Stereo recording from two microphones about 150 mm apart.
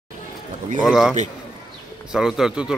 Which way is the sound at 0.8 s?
5° right (ahead or behind).